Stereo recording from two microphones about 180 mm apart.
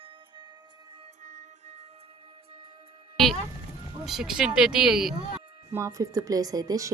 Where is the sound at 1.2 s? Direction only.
45° right (ahead or behind).